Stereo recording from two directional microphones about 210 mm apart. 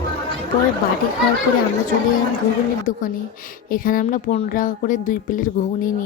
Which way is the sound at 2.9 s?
75° left (ahead or behind).